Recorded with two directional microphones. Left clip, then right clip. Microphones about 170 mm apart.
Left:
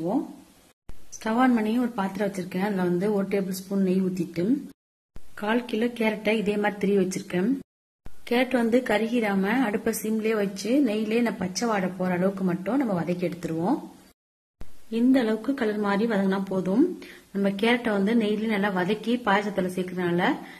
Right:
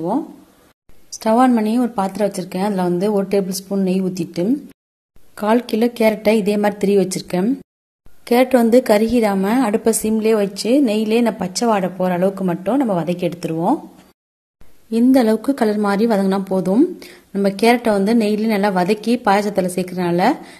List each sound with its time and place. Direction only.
1.2 s a woman's voice: 35° right (ahead or behind)
5.3 s a woman's voice: 45° right (ahead or behind); by 13.7 s 25° right (ahead or behind)
14.9 s a woman's voice: 50° right (ahead or behind)